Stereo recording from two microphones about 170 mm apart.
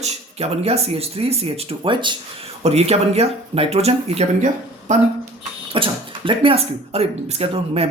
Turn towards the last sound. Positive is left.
turn(degrees=-35)  # may be behind; listen again after turning